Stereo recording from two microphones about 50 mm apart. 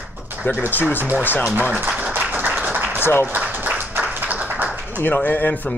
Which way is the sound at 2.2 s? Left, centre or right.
Right.